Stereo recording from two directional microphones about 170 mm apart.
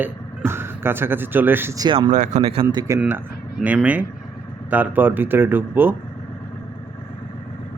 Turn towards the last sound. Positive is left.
turn(degrees=-10)  # may be behind; listen again after turning